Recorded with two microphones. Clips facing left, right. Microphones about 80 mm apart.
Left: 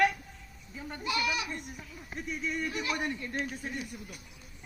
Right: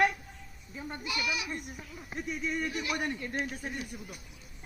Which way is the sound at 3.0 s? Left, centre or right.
Right.